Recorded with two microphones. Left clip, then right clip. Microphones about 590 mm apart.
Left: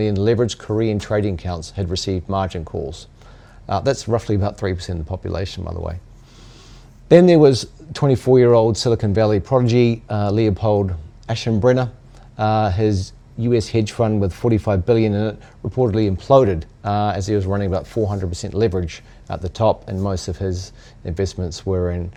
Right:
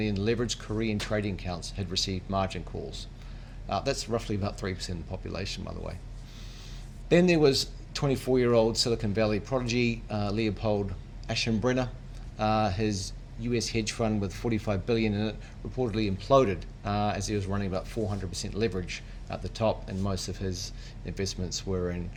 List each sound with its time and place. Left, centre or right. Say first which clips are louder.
0.0 s speech: left 12 dB; left
7.1 s speech: left 12 dB; left